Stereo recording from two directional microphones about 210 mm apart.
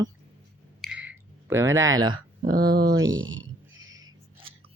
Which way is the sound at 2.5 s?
45° right (ahead or behind).